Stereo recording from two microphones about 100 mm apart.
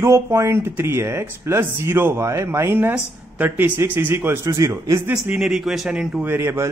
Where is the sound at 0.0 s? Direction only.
30° right (ahead or behind).